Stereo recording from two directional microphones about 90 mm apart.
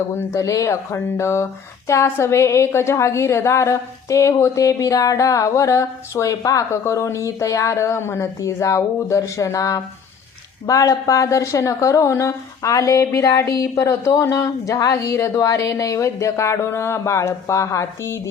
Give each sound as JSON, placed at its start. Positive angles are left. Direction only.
{"t": 0.3, "sound": "a woman's voice", "side_deg": 35}